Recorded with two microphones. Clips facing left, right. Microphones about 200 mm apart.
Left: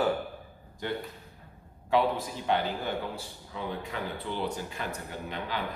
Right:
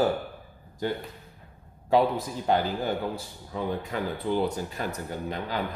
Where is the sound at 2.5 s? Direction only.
40° right (ahead or behind).